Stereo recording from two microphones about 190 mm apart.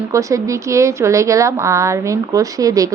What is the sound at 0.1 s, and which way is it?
Speech, 15° right (ahead or behind).